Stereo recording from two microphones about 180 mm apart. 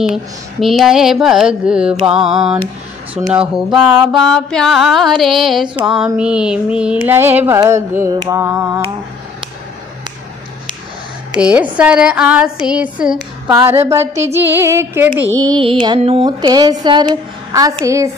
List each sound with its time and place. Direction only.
0.1 s mantra: centre (ahead or behind)
11.3 s mantra: 5° right (ahead or behind)
13.6 s speech: 15° right (ahead or behind)
15.4 s music: 25° right (ahead or behind)